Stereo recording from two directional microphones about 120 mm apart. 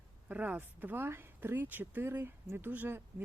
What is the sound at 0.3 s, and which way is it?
Speech, 10° right (ahead or behind).